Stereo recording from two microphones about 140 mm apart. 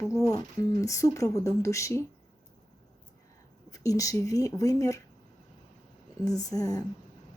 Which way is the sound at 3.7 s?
25° left (ahead or behind).